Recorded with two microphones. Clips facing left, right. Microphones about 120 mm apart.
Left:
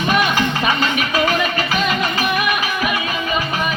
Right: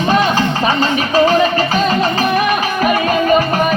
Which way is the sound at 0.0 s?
30° right (ahead or behind).